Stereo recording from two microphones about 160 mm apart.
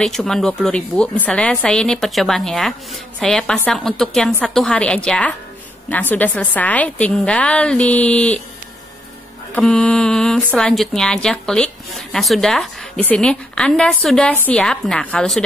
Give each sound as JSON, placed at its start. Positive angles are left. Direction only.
{"t": 0.0, "sound": "a woman's voice", "side_deg": 0}
{"t": 9.6, "sound": "speech", "side_deg": 5}